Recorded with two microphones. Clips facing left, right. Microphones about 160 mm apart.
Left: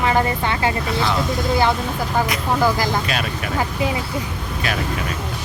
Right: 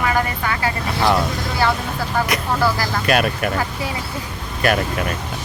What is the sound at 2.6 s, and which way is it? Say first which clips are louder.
Speech: left 3 dB; 20° left (ahead or behind).